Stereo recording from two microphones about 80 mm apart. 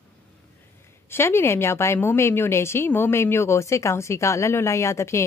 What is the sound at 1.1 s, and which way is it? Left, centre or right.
A woman's voice, left.